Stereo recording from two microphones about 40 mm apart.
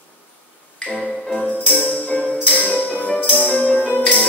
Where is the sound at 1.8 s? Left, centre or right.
Left.